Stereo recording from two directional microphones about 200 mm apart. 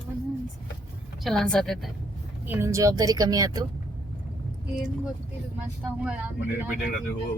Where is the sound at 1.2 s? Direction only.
Centre (ahead or behind).